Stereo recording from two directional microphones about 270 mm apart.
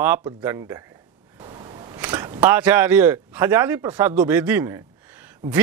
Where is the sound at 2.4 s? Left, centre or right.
Centre.